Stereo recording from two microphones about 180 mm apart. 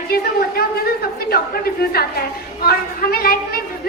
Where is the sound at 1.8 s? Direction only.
55° left (ahead or behind).